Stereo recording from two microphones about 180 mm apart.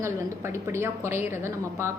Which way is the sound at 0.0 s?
15° right (ahead or behind).